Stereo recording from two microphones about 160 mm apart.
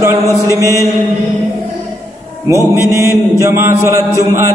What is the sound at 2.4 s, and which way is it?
Mantra, 15° right (ahead or behind).